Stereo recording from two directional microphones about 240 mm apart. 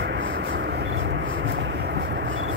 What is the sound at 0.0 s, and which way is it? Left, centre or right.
Vehicle, right.